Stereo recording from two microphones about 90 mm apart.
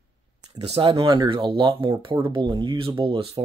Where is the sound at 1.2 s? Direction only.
75° right (ahead or behind).